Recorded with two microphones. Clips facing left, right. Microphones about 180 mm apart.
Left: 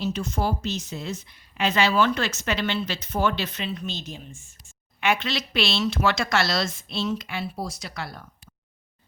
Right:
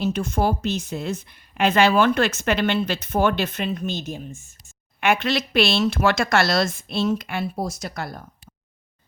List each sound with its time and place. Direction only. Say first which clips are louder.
0.0 s speech: right 4 dB; 55° right (ahead or behind)